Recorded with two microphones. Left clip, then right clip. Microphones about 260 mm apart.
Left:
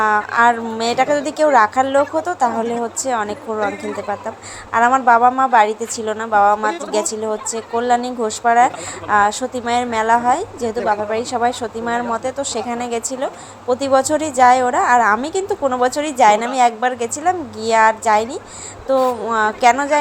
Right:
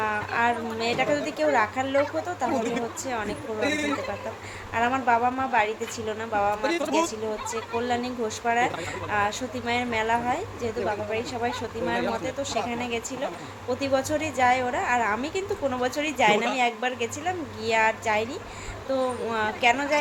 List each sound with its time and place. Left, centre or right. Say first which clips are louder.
0.0 s speech: left 11 dB; left
4.7 s speech: left 11 dB; left